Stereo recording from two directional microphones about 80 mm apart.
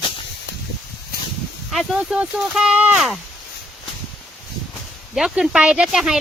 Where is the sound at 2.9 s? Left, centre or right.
Centre.